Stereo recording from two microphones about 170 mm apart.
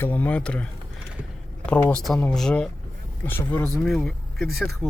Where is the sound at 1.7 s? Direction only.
5° left (ahead or behind).